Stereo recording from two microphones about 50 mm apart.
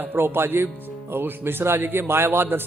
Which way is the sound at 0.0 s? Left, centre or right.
Right.